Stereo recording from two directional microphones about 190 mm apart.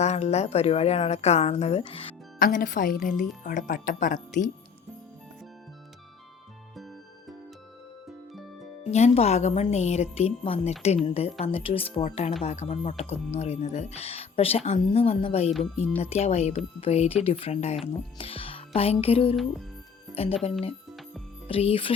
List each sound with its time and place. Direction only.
0.0 s speech: 35° left (ahead or behind)
2.4 s speech: 45° left (ahead or behind)
6.7 s music: centre (ahead or behind)
8.8 s speech: 35° left (ahead or behind)